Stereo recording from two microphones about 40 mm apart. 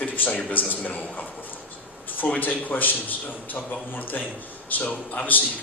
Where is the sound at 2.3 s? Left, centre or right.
Left.